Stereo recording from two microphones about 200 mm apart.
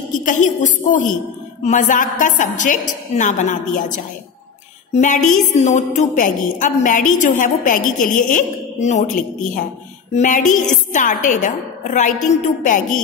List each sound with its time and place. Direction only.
0.2 s a woman's voice: 40° left (ahead or behind)